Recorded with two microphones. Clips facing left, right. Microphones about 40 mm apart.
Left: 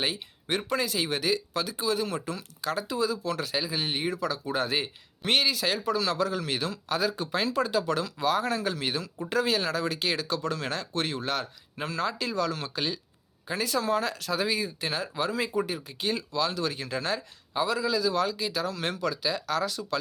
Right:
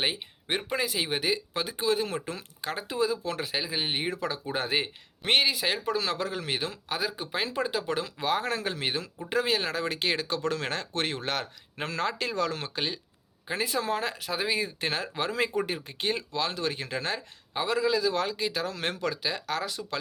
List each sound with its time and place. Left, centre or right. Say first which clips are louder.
0.0 s speech: right 1 dB; right